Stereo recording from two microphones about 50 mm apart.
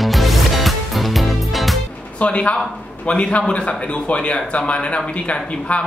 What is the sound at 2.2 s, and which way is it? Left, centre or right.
Speech, left.